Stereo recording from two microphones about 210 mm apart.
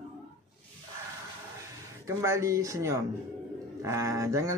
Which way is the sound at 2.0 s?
15° right (ahead or behind).